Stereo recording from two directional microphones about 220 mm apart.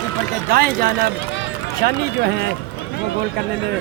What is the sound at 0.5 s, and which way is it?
Speech, 40° right (ahead or behind).